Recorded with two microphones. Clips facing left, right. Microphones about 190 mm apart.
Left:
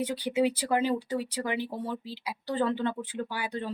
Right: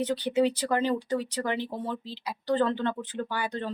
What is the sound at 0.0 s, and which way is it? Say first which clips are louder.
Speech: right 2 dB; 10° left (ahead or behind).